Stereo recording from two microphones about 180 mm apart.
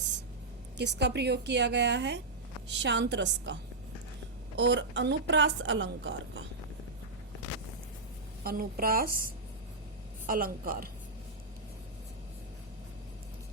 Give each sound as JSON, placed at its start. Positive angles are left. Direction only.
{"t": 0.8, "sound": "a woman's voice", "side_deg": -70}
{"t": 8.4, "sound": "a woman's voice", "side_deg": -55}
{"t": 10.2, "sound": "a woman's voice", "side_deg": -55}